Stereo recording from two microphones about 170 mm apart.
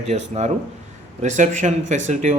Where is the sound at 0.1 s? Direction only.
40° right (ahead or behind).